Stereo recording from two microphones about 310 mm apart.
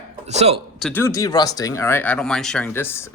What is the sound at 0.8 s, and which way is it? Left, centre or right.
Speech, centre.